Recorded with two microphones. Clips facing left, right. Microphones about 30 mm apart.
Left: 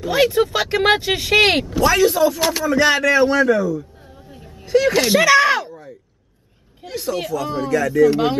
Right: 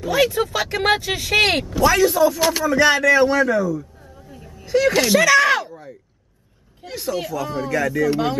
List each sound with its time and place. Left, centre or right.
0.0 s speech: left
4.3 s a sound: left
4.6 s speech: centre
5.1 s speech: centre
5.6 s a sound: centre
6.8 s speech: centre